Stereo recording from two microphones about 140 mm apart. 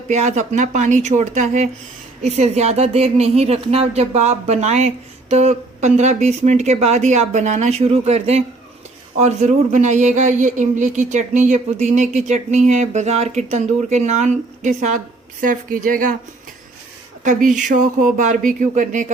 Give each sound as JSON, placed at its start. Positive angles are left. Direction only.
{"t": 0.1, "sound": "speech", "side_deg": -55}
{"t": 17.2, "sound": "speech", "side_deg": -65}